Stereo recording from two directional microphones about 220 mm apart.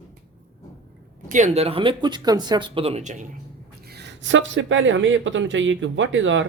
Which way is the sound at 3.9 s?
50° right (ahead or behind).